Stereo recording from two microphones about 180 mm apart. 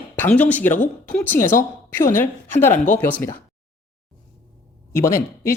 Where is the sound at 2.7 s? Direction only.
45° left (ahead or behind).